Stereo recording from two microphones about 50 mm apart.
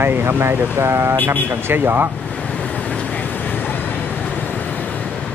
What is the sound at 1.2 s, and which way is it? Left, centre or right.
Speech, right.